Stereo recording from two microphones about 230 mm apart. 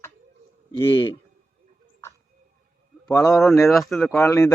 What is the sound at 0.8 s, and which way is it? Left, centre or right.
Speech, left.